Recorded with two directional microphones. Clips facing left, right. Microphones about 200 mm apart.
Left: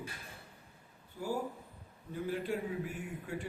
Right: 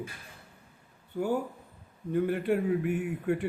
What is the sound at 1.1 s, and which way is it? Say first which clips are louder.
A man's voice: right 7 dB; 65° right (ahead or behind).